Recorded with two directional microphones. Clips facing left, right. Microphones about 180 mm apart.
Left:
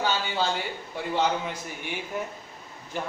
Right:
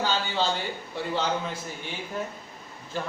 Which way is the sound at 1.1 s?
15° left (ahead or behind).